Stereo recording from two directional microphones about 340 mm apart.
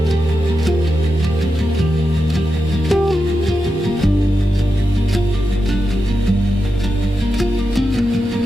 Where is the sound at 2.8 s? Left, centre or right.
Centre.